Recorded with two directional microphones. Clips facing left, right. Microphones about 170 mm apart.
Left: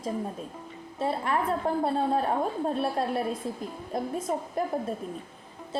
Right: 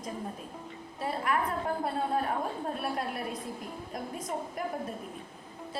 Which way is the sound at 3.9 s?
25° left (ahead or behind).